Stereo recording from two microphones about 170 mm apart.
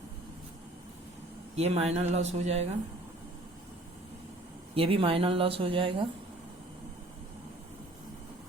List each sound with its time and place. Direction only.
1.5 s speech: 40° right (ahead or behind)
4.7 s speech: 35° right (ahead or behind)